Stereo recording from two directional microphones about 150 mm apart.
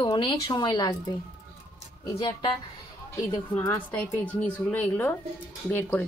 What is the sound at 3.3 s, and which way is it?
A woman's voice, 15° left (ahead or behind).